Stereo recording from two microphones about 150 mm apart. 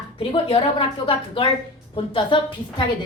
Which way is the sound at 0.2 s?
35° left (ahead or behind).